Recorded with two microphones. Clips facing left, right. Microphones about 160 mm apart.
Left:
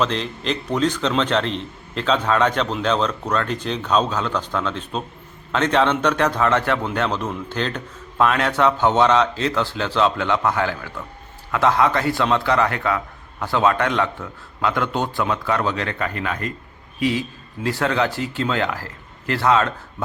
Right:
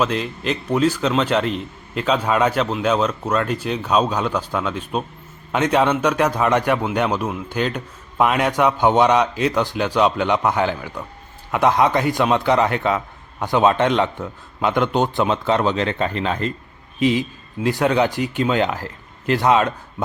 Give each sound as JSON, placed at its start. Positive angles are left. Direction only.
{"t": 0.0, "sound": "a man's voice", "side_deg": -5}